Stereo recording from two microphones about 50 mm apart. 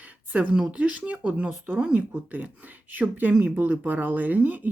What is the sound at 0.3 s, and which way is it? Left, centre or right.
Speech, right.